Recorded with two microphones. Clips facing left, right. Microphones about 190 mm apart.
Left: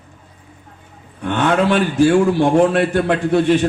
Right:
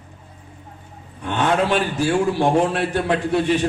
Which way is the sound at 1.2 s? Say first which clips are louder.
Left 3 dB; 55° left (ahead or behind).